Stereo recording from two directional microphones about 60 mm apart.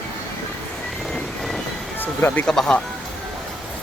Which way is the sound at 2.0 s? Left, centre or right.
Left.